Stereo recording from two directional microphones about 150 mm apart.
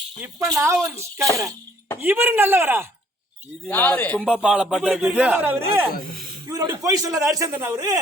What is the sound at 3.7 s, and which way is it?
Speech, 10° left (ahead or behind).